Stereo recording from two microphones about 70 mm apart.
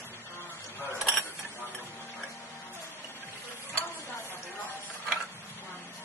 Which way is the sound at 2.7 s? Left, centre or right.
Left.